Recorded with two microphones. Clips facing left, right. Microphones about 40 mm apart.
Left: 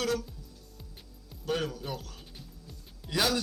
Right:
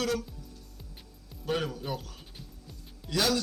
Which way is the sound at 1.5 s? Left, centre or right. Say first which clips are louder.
Right 1 dB; centre.